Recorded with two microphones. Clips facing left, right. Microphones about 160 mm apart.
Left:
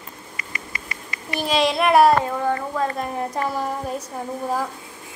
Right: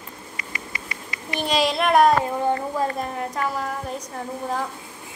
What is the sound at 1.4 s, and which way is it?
Speech, centre (ahead or behind).